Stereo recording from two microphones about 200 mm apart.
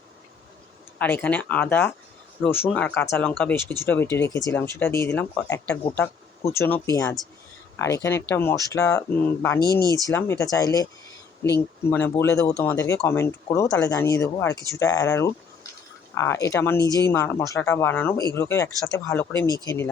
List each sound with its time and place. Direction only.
0.9 s speech: 10° left (ahead or behind)
11.9 s speech: 10° left (ahead or behind)